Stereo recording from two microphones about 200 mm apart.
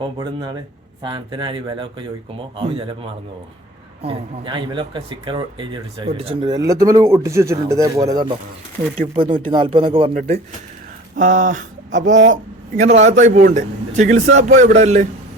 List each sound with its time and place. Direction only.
0.0 s speech: 20° right (ahead or behind)